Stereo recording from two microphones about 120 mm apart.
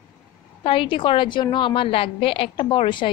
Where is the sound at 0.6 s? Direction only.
50° left (ahead or behind).